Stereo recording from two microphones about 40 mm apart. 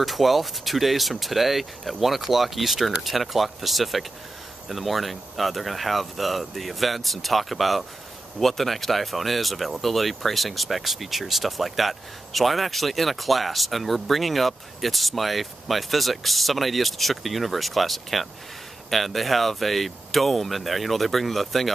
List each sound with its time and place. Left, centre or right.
0.0 s speech: centre